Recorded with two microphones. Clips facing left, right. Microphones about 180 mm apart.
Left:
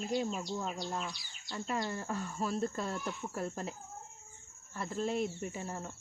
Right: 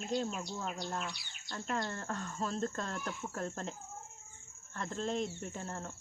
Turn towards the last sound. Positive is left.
turn(degrees=5)  # may be behind; listen again after turning